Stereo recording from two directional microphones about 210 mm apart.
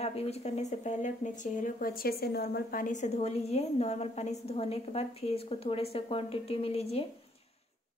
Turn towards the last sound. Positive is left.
turn(degrees=30)  # may be behind; listen again after turning